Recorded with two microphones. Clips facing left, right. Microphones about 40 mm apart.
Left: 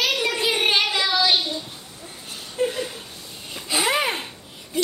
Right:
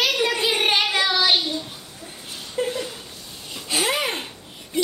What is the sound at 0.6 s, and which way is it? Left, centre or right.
Child singing, right.